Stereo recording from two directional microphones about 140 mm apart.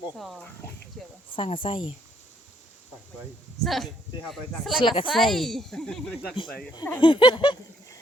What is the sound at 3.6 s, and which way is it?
Speech, centre (ahead or behind).